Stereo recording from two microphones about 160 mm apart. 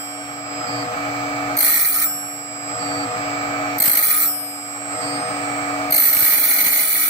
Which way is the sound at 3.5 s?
30° left (ahead or behind).